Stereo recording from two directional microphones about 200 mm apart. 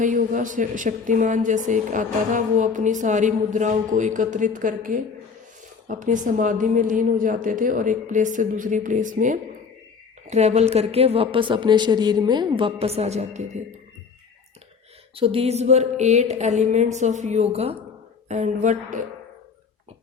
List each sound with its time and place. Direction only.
0.0 s a woman's voice: 40° right (ahead or behind)
15.1 s a woman's voice: 30° right (ahead or behind)